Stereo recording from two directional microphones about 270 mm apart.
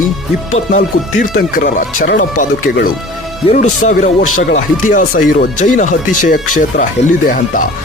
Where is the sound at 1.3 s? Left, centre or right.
Left.